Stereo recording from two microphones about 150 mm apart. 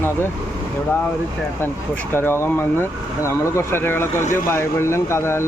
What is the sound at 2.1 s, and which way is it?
Speech, 15° left (ahead or behind).